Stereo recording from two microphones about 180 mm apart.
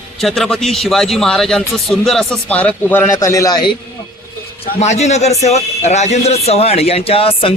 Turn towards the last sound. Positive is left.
turn(degrees=30)  # may be behind; listen again after turning